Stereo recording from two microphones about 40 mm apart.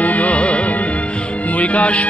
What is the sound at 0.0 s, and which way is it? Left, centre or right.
Music, left.